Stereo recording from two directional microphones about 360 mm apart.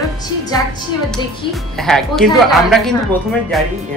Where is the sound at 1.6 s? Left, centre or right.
Centre.